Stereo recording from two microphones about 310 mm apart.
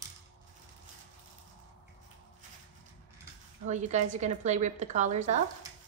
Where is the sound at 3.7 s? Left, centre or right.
Right.